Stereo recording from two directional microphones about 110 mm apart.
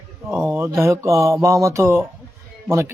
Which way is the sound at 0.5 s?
25° right (ahead or behind).